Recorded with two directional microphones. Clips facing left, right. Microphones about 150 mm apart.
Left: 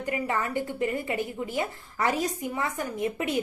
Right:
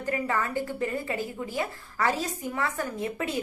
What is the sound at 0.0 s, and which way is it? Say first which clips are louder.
A woman's voice: even; 15° left (ahead or behind).